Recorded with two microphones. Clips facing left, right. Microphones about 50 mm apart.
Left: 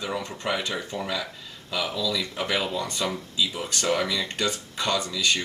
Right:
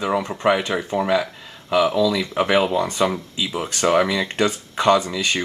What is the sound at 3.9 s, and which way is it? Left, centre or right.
Speech, right.